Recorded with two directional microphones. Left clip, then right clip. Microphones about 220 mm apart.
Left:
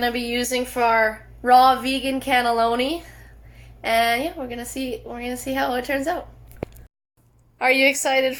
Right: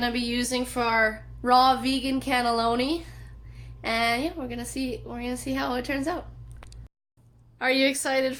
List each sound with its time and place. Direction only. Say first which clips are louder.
0.0 s a woman's voice: left 5 dB; 5° right (ahead or behind)
7.6 s speech: left 6 dB; 5° left (ahead or behind)